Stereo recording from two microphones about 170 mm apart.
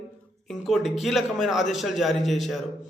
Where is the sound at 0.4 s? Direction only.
Centre (ahead or behind).